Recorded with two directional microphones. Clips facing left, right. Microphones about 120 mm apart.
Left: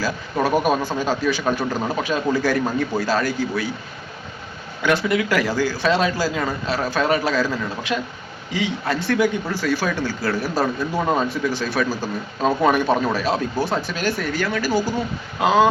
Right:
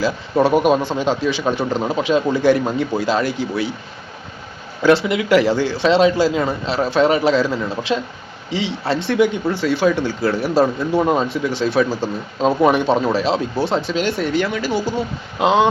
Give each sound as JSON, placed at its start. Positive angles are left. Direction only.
{"t": 0.0, "sound": "speech", "side_deg": -25}
{"t": 4.8, "sound": "speech", "side_deg": -30}